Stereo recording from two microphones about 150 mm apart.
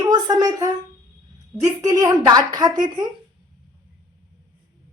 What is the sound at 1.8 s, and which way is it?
A woman's voice, 25° right (ahead or behind).